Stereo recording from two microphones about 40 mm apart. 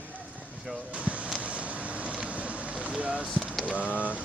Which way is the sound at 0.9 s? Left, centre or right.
Right.